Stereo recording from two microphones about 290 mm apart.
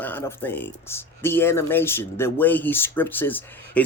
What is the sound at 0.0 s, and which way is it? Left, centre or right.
Speech, centre.